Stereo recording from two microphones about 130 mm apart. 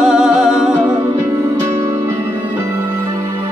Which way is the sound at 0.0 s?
5° right (ahead or behind).